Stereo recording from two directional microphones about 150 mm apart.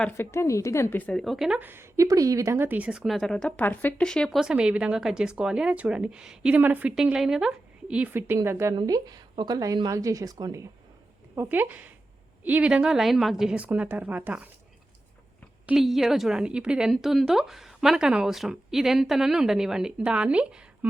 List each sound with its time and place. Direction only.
0.2 s a woman's voice: 15° left (ahead or behind); by 8.7 s 20° right (ahead or behind)
8.7 s a woman's voice: 30° right (ahead or behind); by 14.5 s 10° right (ahead or behind)
15.6 s a woman's voice: centre (ahead or behind)